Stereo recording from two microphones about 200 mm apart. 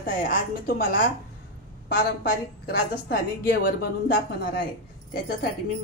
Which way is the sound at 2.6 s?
45° left (ahead or behind).